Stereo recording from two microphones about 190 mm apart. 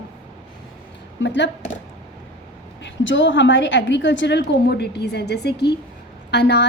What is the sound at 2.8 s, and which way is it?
A woman's voice, 75° left (ahead or behind).